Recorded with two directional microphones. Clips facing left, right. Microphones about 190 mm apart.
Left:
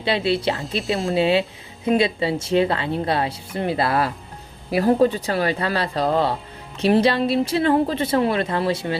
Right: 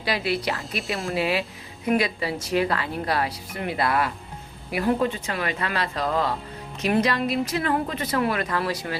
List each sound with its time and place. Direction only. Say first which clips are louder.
0.0 s speech: left 5 dB; 25° left (ahead or behind)